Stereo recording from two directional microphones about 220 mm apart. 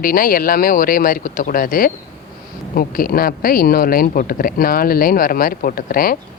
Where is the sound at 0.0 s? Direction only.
40° left (ahead or behind).